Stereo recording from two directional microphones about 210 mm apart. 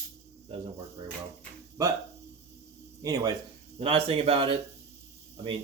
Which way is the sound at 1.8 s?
15° right (ahead or behind).